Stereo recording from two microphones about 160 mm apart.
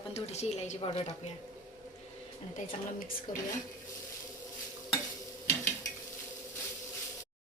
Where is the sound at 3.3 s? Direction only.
60° left (ahead or behind).